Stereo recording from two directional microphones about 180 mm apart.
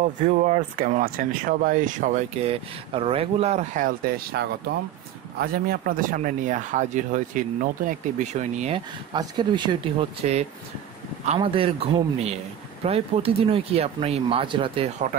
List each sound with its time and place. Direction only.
0.0 s speech: 40° right (ahead or behind)
8.7 s speech: 25° right (ahead or behind)
11.2 s speech: 30° right (ahead or behind)